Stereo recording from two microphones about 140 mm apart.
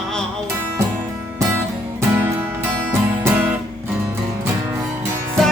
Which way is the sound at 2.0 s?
15° right (ahead or behind).